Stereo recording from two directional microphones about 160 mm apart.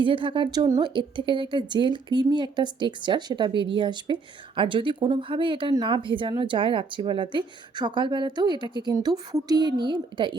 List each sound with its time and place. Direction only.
0.0 s speech: 30° right (ahead or behind)